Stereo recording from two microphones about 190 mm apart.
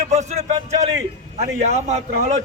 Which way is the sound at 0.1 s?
35° right (ahead or behind).